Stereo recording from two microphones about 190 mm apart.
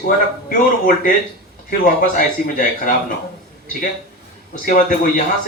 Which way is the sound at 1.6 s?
45° left (ahead or behind).